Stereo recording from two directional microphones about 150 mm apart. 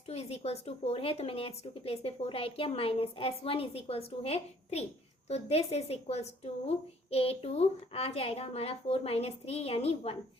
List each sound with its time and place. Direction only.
0.1 s a woman's voice: 45° left (ahead or behind)